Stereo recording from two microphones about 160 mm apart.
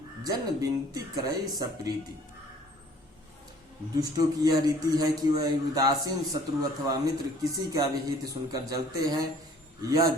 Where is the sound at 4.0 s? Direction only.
25° right (ahead or behind).